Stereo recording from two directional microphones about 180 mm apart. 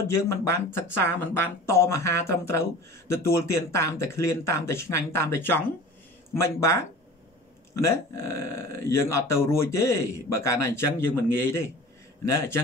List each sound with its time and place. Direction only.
0.1 s speech: 15° left (ahead or behind)